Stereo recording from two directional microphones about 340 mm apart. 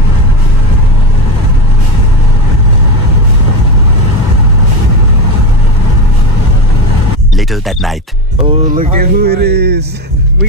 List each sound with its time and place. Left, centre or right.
7.3 s speech: centre
8.5 s speech: right